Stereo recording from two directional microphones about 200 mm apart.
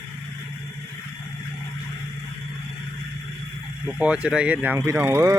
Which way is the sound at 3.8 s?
5° right (ahead or behind).